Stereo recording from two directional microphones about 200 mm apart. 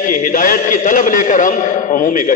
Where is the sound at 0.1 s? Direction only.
40° left (ahead or behind).